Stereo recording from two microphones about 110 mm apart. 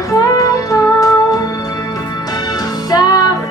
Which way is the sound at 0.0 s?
30° left (ahead or behind).